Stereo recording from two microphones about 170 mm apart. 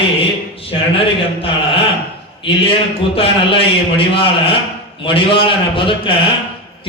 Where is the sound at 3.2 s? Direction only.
35° left (ahead or behind).